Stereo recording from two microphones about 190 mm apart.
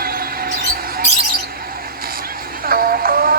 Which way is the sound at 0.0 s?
50° right (ahead or behind).